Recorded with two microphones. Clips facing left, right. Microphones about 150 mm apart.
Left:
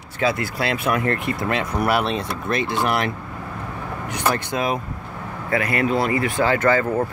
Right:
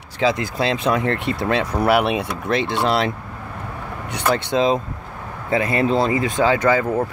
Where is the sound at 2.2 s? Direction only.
90° right.